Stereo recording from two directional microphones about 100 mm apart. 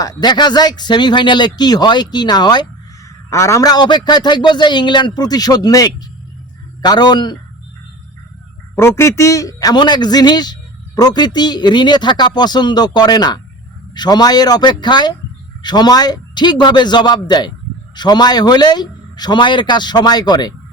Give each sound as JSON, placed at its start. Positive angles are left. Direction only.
{"t": 0.0, "sound": "a man's voice", "side_deg": 40}
{"t": 3.2, "sound": "a man's voice", "side_deg": 30}
{"t": 8.7, "sound": "a man's voice", "side_deg": 25}